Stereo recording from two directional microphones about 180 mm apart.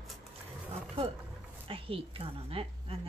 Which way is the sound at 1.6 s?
30° right (ahead or behind).